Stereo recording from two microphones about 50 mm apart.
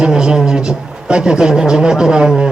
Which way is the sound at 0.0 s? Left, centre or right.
Centre.